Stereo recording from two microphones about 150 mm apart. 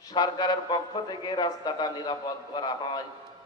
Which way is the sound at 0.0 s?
25° left (ahead or behind).